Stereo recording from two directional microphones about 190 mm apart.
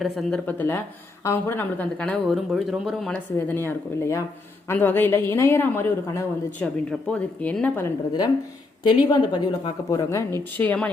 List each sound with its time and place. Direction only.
0.0 s speech: centre (ahead or behind)
3.3 s a woman's voice: 10° left (ahead or behind)
8.8 s a woman's voice: 20° left (ahead or behind); by 10.9 s 5° left (ahead or behind)